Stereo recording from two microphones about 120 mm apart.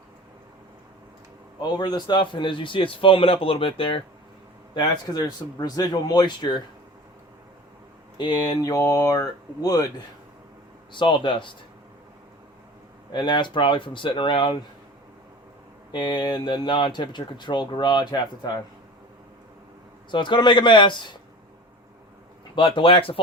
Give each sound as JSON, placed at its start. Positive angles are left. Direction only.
{"t": 1.6, "sound": "a man's voice", "side_deg": 35}
{"t": 4.7, "sound": "speech", "side_deg": 40}
{"t": 8.2, "sound": "speech", "side_deg": 35}
{"t": 10.9, "sound": "a man's voice", "side_deg": 40}
{"t": 13.1, "sound": "speech", "side_deg": 40}
{"t": 15.9, "sound": "speech", "side_deg": 40}
{"t": 20.1, "sound": "speech", "side_deg": 40}
{"t": 22.5, "sound": "a man's voice", "side_deg": 45}